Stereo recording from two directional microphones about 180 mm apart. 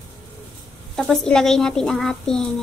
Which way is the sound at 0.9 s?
Centre (ahead or behind).